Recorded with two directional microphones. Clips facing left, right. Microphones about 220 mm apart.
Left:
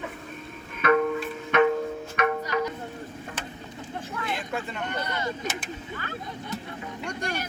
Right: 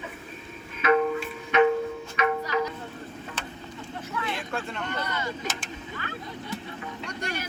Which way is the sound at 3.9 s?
45° left (ahead or behind).